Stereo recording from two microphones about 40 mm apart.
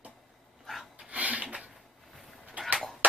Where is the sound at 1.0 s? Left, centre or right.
Right.